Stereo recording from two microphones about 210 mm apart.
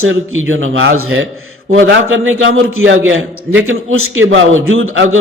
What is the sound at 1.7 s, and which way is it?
A man's voice, 65° right (ahead or behind).